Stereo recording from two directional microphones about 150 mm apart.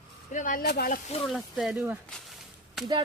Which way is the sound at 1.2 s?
Centre (ahead or behind).